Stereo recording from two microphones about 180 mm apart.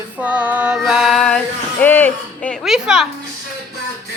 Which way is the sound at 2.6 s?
Centre (ahead or behind).